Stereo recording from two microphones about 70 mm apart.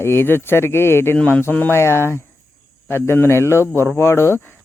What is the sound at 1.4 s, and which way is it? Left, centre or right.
Speech, left.